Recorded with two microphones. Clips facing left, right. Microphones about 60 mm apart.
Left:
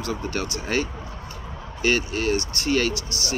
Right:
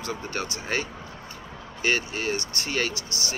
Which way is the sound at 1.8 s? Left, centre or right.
Right.